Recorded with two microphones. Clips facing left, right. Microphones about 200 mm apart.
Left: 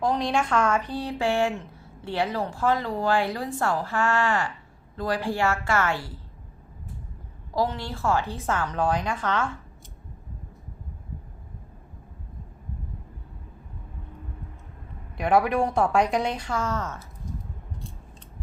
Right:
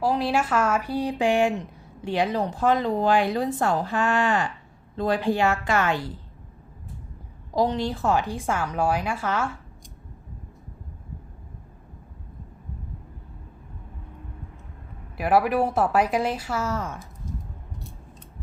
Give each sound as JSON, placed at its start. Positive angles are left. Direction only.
{"t": 0.0, "sound": "a woman's voice", "side_deg": -5}
{"t": 7.5, "sound": "a woman's voice", "side_deg": -20}
{"t": 15.2, "sound": "speech", "side_deg": -5}